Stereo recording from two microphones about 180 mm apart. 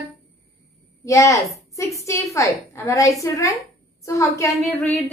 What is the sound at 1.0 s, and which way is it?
A child's voice, 15° left (ahead or behind).